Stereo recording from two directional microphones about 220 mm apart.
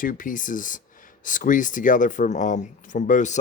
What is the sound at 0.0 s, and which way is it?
Speech, 40° left (ahead or behind).